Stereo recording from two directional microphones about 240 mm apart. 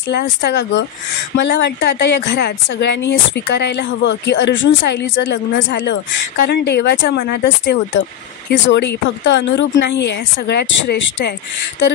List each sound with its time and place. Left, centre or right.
0.1 s a woman's voice: left